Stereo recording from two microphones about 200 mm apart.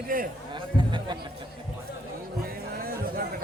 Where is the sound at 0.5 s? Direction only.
25° right (ahead or behind).